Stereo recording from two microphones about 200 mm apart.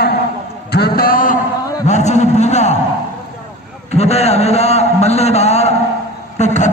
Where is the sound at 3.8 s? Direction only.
30° left (ahead or behind).